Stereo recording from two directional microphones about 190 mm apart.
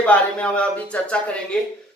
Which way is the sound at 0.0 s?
5° left (ahead or behind).